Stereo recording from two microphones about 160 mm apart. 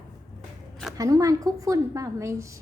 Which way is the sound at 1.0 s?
20° right (ahead or behind).